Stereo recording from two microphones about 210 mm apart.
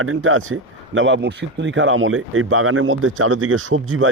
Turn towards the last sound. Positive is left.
turn(degrees=-70)  # may be behind; listen again after turning